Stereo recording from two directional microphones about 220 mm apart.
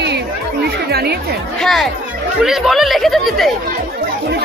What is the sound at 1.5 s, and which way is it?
Speech, centre (ahead or behind).